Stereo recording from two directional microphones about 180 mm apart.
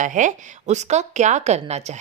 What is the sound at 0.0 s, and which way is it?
Speech, 45° right (ahead or behind).